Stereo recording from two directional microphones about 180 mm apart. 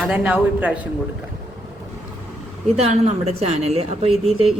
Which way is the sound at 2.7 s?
35° right (ahead or behind).